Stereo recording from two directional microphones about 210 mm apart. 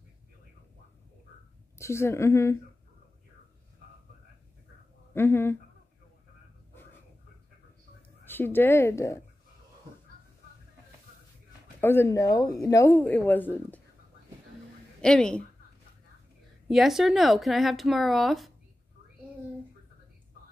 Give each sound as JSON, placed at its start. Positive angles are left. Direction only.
{"t": 1.8, "sound": "speech", "side_deg": 15}
{"t": 5.1, "sound": "speech", "side_deg": 10}
{"t": 8.3, "sound": "speech", "side_deg": 10}
{"t": 11.8, "sound": "speech", "side_deg": 10}
{"t": 15.0, "sound": "a woman's voice", "side_deg": 5}
{"t": 16.6, "sound": "a woman's voice", "side_deg": 0}